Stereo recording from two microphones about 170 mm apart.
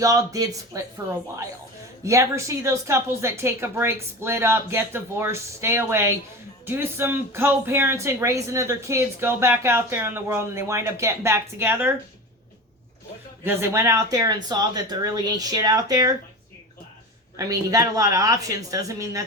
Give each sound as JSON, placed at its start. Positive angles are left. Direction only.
{"t": 0.0, "sound": "speech", "side_deg": -20}
{"t": 2.0, "sound": "speech", "side_deg": -15}
{"t": 13.4, "sound": "speech", "side_deg": -15}
{"t": 17.3, "sound": "speech", "side_deg": -20}